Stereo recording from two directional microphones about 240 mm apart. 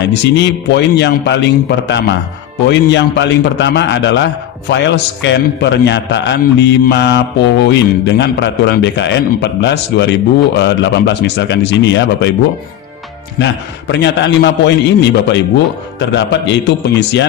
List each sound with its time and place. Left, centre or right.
0.0 s a man's voice: left
13.4 s a man's voice: left